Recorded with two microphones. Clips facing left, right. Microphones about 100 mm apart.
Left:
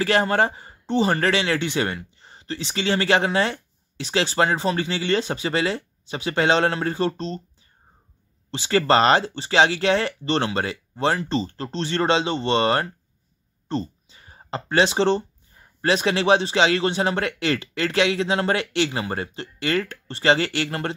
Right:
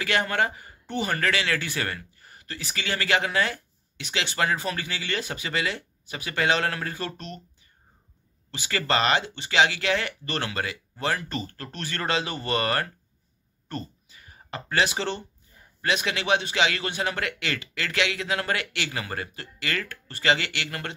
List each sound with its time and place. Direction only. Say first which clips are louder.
0.0 s speech: left 5 dB; 35° left (ahead or behind)
8.5 s a man's voice: left 8 dB; 30° left (ahead or behind)